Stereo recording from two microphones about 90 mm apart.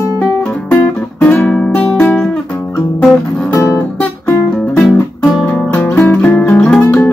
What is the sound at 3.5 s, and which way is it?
Guitar, 25° left (ahead or behind).